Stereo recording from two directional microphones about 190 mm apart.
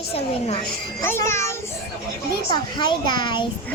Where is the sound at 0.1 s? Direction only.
30° left (ahead or behind).